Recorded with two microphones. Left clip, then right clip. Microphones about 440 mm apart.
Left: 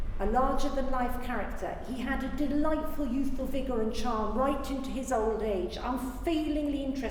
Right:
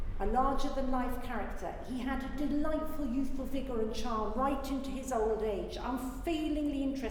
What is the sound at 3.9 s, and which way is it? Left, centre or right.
A woman's voice, left.